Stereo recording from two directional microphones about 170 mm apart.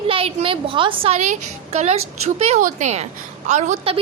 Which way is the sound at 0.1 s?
35° right (ahead or behind).